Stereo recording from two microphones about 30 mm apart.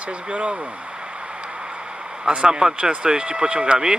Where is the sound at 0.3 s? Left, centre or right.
Right.